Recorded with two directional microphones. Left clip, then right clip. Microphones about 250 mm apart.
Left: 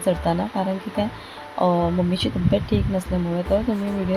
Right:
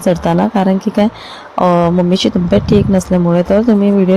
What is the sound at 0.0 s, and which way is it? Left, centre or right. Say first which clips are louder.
Speech: right 9 dB; right.